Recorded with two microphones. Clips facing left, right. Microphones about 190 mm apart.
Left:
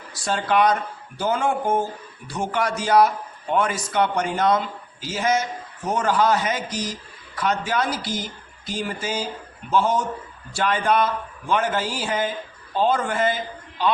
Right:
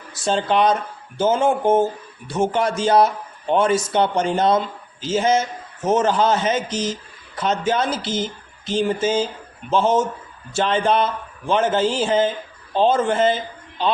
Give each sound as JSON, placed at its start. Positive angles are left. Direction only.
{"t": 0.1, "sound": "a man's voice", "side_deg": -25}